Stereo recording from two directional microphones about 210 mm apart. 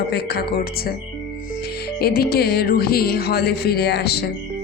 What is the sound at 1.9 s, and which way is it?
Speech, 50° left (ahead or behind).